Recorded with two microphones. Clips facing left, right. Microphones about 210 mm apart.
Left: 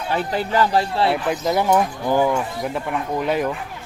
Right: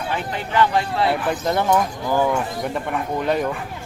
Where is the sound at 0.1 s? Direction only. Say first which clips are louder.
Left 5 dB; 35° left (ahead or behind).